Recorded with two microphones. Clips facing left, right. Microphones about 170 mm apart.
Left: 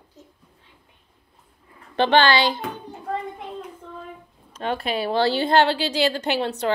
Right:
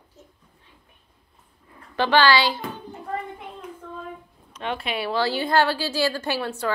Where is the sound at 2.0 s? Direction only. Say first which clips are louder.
Left 1 dB; 25° left (ahead or behind).